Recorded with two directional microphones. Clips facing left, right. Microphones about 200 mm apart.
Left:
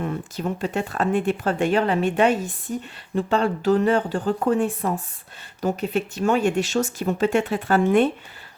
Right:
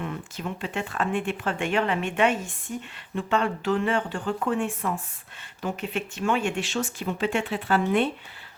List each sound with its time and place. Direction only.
0.0 s speech: 40° left (ahead or behind)